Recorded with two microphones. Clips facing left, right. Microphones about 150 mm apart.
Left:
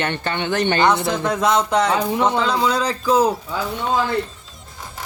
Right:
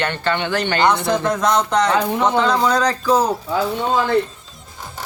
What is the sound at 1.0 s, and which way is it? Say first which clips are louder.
A man's voice: right 1 dB; 5° left (ahead or behind).